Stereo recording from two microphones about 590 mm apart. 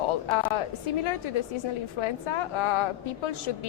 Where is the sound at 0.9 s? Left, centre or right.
Left.